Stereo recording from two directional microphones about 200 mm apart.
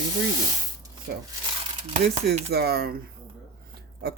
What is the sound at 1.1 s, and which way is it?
Speech, 55° right (ahead or behind).